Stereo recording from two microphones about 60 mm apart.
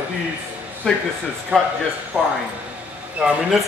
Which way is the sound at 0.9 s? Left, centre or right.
Centre.